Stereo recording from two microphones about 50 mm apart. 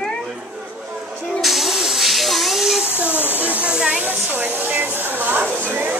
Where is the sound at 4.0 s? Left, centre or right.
Right.